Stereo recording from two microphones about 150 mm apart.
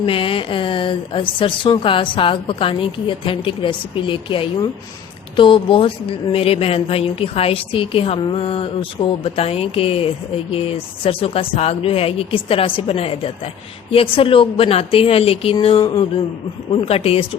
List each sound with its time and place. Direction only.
0.0 s mantra: 35° left (ahead or behind)